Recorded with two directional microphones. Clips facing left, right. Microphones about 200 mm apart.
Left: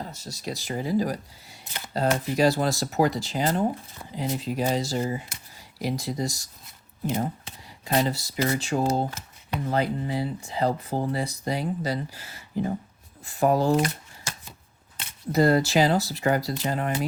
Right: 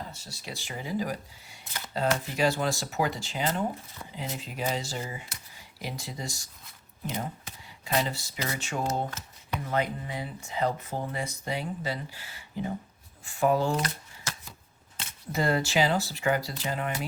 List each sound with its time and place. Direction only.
0.1 s speech: 40° left (ahead or behind)
14.3 s a sound: 15° left (ahead or behind)
15.3 s speech: 40° left (ahead or behind)